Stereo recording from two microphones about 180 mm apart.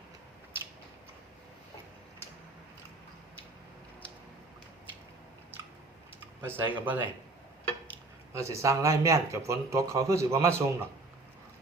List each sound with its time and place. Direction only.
6.1 s a sound: 10° right (ahead or behind)
6.8 s speech: 10° right (ahead or behind)
8.3 s speech: 15° right (ahead or behind)